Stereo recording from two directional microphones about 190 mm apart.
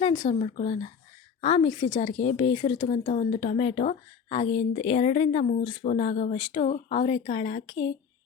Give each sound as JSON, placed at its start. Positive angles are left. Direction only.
{"t": 0.0, "sound": "speech", "side_deg": 25}
{"t": 0.3, "sound": "speech", "side_deg": 40}
{"t": 1.4, "sound": "a woman's voice", "side_deg": 25}